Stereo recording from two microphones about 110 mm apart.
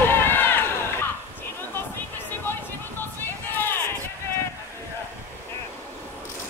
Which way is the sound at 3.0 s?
20° left (ahead or behind).